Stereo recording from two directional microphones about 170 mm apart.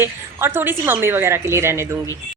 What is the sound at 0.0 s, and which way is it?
A woman's voice, 15° right (ahead or behind).